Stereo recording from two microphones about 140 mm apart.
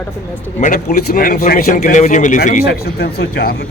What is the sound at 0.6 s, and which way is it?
Speech, 65° left (ahead or behind).